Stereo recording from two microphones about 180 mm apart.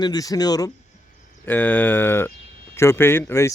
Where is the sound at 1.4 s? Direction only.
10° left (ahead or behind).